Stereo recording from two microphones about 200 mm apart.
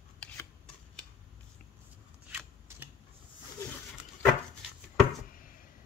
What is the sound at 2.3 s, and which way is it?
Scissors, 10° right (ahead or behind).